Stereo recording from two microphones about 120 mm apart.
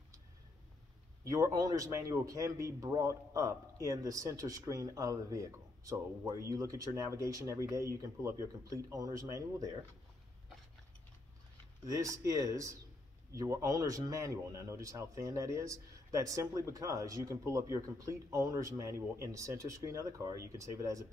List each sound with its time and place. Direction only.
1.2 s speech: 25° right (ahead or behind)
11.8 s speech: 30° right (ahead or behind)